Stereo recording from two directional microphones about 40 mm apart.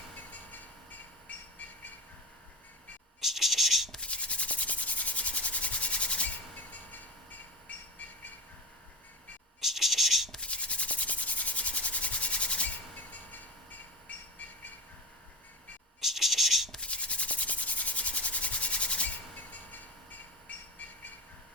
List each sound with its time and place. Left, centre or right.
0.3 s train: left
3.2 s scratch: centre
4.0 s rub: left
9.6 s scratch: centre
10.4 s rub: left
16.0 s scratch: centre
16.8 s rub: left